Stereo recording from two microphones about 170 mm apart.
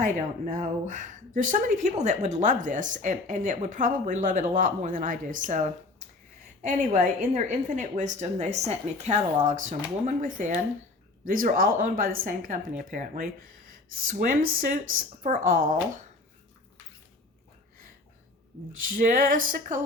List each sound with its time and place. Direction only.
0.0 s speech: 45° right (ahead or behind)
18.8 s speech: 55° right (ahead or behind)